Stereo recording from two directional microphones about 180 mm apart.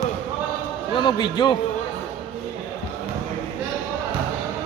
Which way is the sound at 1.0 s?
25° left (ahead or behind).